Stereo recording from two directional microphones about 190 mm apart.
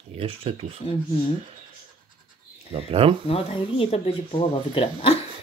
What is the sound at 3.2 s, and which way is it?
Speech, 30° left (ahead or behind).